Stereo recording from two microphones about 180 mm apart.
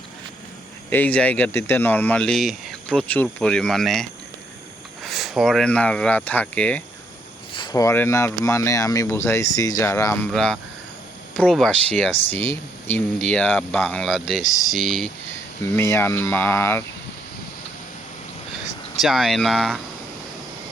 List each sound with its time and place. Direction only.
0.9 s speech: 10° left (ahead or behind)
7.5 s speech: 25° left (ahead or behind)
10.3 s speech: 5° left (ahead or behind)
15.7 s speech: 15° left (ahead or behind)
19.0 s speech: centre (ahead or behind)